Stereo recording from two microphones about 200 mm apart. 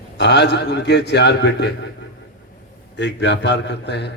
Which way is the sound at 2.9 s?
60° left (ahead or behind).